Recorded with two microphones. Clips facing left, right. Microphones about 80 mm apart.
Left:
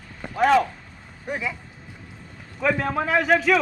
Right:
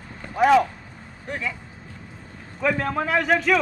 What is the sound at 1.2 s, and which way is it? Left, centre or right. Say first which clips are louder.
Speech: left 1 dB; centre.